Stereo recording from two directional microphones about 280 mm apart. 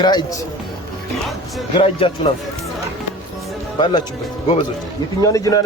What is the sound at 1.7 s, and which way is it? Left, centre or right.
Speech, centre.